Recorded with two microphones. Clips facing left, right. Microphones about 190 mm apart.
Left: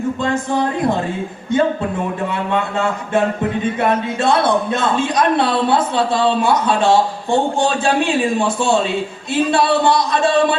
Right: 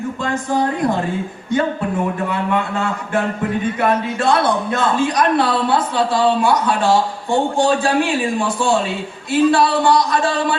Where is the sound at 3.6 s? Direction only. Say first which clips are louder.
Even; 25° left (ahead or behind).